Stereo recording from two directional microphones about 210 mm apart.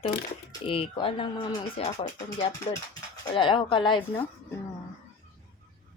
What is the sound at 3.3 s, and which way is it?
Speech, 25° left (ahead or behind).